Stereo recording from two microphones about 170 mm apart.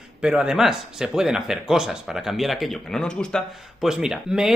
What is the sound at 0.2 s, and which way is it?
A man's voice, 5° right (ahead or behind).